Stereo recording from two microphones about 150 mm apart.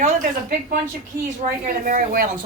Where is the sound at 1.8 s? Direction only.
70° right (ahead or behind).